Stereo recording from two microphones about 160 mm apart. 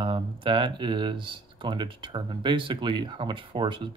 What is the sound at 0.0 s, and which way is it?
Speech, 30° right (ahead or behind).